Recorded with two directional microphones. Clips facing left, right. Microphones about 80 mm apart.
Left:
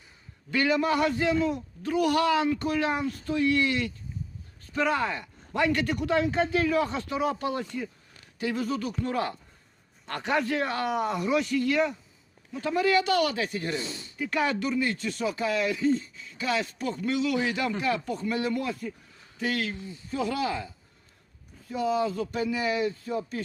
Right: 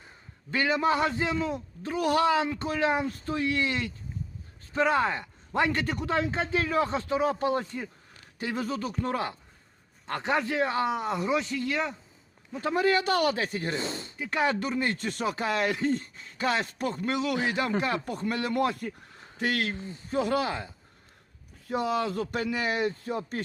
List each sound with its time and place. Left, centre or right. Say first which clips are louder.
0.5 s a man's voice: left 1 dB; right
14.2 s a man's voice: even; right
21.7 s speech: left 1 dB; right